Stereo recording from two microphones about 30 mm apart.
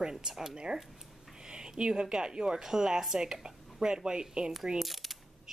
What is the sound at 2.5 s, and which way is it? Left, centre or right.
Speech, centre.